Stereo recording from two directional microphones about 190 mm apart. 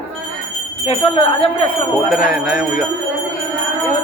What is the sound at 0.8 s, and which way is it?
Speech, 30° left (ahead or behind).